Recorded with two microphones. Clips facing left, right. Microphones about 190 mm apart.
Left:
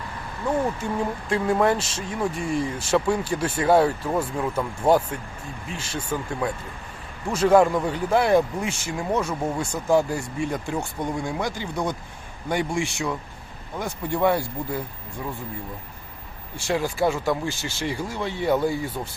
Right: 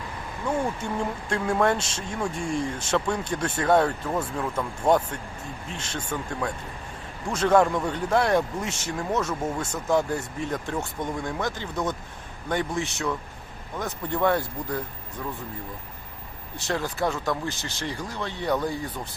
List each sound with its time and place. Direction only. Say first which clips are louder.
0.9 s speech: left 3 dB; 5° left (ahead or behind)
16.7 s speech: left 4 dB; 5° left (ahead or behind)
17.8 s speech: left 4 dB; 15° left (ahead or behind)